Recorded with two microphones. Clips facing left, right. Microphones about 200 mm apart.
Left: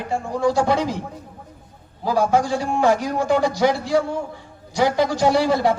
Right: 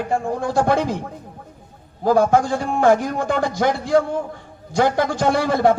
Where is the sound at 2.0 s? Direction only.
50° right (ahead or behind).